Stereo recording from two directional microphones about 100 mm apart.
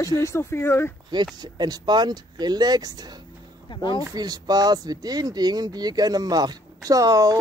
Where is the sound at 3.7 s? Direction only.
50° left (ahead or behind).